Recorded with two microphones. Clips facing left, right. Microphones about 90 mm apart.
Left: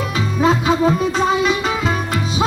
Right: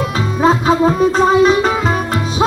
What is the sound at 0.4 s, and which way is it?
Music, 35° right (ahead or behind).